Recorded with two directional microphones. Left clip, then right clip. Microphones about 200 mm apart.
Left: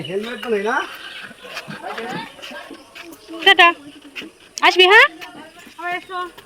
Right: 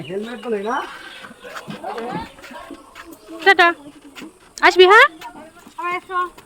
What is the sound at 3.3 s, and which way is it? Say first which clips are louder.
Speech: left 2 dB; 20° right (ahead or behind).